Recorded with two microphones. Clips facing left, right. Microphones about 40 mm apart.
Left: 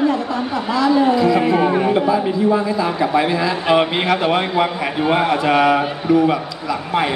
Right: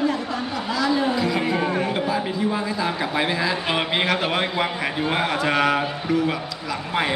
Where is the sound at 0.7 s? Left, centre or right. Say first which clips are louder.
Left 7 dB; centre.